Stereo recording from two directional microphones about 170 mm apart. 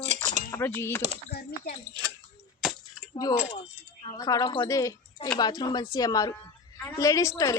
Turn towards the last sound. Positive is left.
turn(degrees=20)  # may be behind; listen again after turning